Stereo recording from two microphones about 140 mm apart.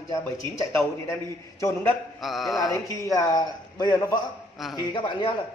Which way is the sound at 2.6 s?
25° left (ahead or behind).